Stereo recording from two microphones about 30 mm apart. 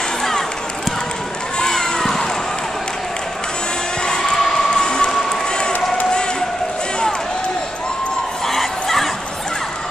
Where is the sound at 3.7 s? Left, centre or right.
Left.